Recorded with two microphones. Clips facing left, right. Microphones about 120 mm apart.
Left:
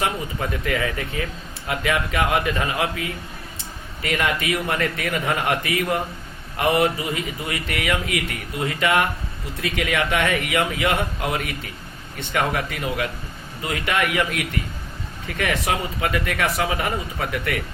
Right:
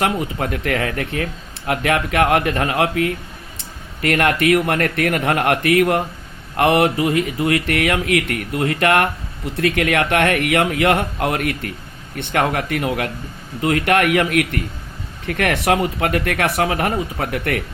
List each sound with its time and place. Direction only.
0.0 s speech: 65° right (ahead or behind)